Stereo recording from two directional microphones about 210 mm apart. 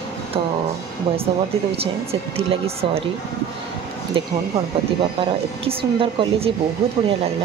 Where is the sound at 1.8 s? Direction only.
30° right (ahead or behind).